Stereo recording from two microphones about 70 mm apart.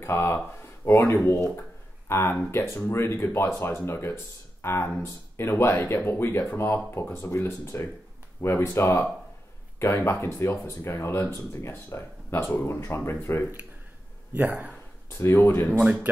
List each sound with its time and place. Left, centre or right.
0.0 s speech: left
14.3 s speech: right
15.0 s speech: left
15.8 s speech: centre